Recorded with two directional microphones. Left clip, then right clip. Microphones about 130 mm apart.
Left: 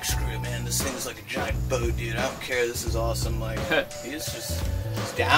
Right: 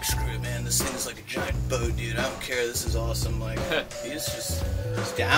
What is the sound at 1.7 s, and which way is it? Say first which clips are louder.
Speech: left 1 dB; 25° right (ahead or behind).